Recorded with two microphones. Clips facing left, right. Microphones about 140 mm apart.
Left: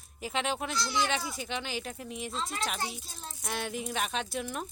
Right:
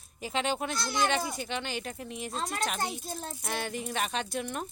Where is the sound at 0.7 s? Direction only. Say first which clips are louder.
Left 1 dB; 50° right (ahead or behind).